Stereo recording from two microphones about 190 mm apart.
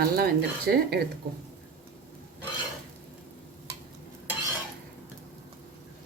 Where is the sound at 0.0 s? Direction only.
50° right (ahead or behind).